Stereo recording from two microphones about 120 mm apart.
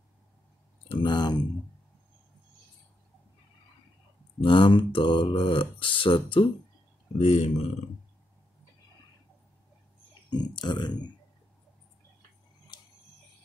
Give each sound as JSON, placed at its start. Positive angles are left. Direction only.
{"t": 0.8, "sound": "speech", "side_deg": 40}
{"t": 4.4, "sound": "speech", "side_deg": 45}
{"t": 7.2, "sound": "speech", "side_deg": 65}
{"t": 10.3, "sound": "speech", "side_deg": 40}